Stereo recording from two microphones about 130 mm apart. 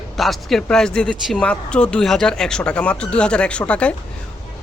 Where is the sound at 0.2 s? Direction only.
Centre (ahead or behind).